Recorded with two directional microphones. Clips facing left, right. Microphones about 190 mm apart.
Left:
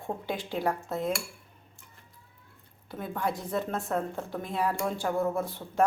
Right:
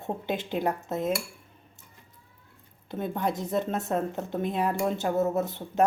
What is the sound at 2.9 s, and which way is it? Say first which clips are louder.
Speech: right 3 dB; 20° right (ahead or behind).